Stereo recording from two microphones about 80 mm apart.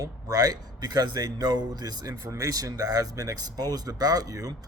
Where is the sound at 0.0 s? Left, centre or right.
Right.